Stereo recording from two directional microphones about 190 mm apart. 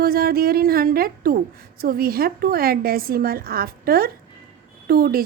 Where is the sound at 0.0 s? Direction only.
50° right (ahead or behind).